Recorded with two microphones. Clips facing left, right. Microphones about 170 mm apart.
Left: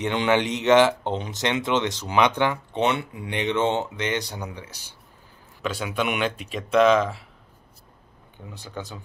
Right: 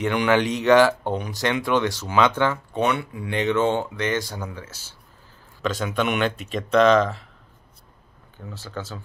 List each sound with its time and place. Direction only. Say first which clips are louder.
0.0 s speech: right 2 dB; 20° left (ahead or behind)
8.5 s speech: right 2 dB; 15° left (ahead or behind)